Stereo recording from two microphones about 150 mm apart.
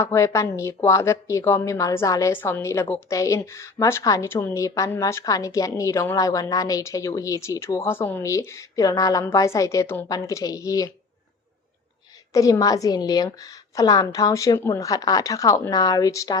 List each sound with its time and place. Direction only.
0.0 s a woman's voice: 20° left (ahead or behind)
12.3 s a woman's voice: 25° left (ahead or behind)